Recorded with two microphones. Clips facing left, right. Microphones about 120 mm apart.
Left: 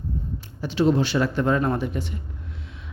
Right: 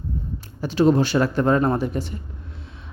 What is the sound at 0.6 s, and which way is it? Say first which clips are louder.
Speech: right 3 dB; 45° right (ahead or behind).